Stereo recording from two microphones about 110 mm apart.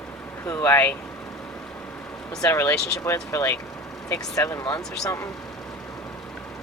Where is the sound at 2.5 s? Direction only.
25° left (ahead or behind).